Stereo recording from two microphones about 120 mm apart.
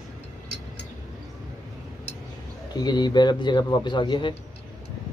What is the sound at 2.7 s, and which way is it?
A man's voice, 35° left (ahead or behind).